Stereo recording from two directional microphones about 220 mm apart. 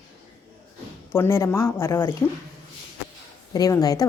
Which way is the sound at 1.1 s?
10° left (ahead or behind).